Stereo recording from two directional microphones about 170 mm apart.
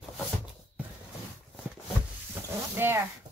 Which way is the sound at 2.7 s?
15° right (ahead or behind).